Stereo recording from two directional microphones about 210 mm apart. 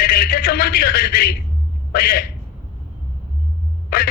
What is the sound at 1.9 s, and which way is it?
Speech, 45° left (ahead or behind).